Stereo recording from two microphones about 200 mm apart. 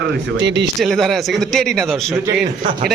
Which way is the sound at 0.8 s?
Centre (ahead or behind).